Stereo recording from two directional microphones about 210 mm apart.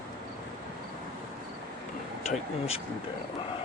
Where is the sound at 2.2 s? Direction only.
30° left (ahead or behind).